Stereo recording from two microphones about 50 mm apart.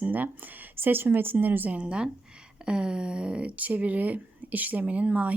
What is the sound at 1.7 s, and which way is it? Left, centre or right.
Speech, right.